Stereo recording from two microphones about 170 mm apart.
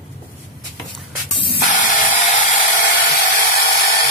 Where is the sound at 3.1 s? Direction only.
55° left (ahead or behind).